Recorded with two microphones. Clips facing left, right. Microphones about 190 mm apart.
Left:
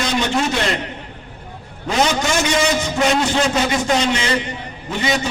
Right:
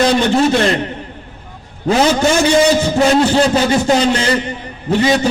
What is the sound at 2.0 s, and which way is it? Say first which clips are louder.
A man's voice: right 7 dB; 35° right (ahead or behind).